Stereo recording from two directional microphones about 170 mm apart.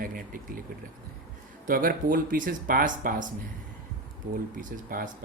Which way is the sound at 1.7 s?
55° right (ahead or behind).